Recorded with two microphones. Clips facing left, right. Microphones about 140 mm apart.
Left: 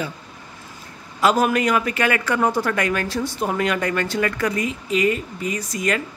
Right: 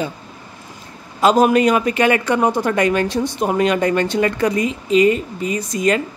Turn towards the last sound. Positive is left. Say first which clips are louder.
# right 6 dB
turn(degrees=-25)  # may be behind; listen again after turning